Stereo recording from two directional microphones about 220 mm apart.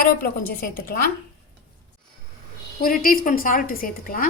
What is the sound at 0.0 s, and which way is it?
Speech, 40° left (ahead or behind).